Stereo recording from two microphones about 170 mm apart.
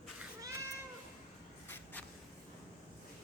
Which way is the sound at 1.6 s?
10° left (ahead or behind).